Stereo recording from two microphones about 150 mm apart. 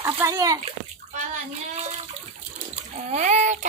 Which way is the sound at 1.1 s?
55° right (ahead or behind).